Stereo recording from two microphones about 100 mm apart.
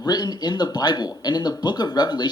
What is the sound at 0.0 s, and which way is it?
Speech, 45° left (ahead or behind).